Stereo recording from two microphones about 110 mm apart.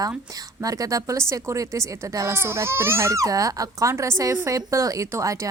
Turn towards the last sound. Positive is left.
turn(degrees=-30)  # may be behind; listen again after turning